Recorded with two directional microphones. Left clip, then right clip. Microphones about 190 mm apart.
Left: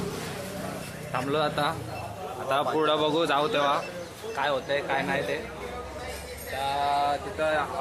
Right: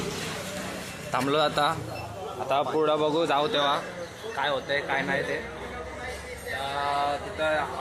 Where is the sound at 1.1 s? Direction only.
50° right (ahead or behind).